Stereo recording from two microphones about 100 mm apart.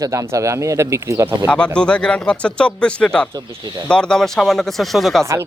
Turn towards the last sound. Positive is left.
turn(degrees=0)  # may be behind; listen again after turning